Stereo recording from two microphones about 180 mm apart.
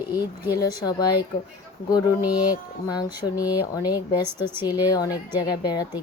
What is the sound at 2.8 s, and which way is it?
Speech, 20° left (ahead or behind).